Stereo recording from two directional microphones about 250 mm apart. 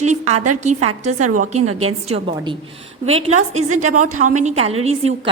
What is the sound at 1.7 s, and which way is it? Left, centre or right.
Speech, right.